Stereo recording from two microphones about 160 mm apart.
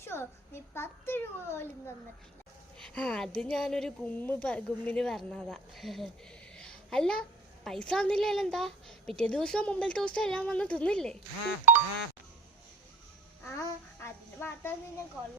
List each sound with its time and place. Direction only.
0.0 s a child's voice: 15° left (ahead or behind)
2.8 s a woman's voice: 5° left (ahead or behind)
11.7 s speech: 10° right (ahead or behind)
13.6 s a child's voice: 15° left (ahead or behind)